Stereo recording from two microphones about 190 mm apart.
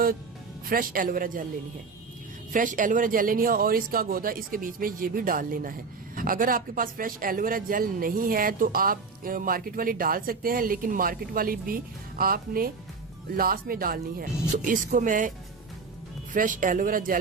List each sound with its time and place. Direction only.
0.6 s a man's voice: 50° right (ahead or behind)
2.5 s a man's voice: 45° right (ahead or behind)
16.3 s a man's voice: 45° right (ahead or behind)